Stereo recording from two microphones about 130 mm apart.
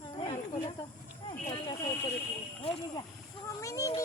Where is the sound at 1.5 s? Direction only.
30° left (ahead or behind).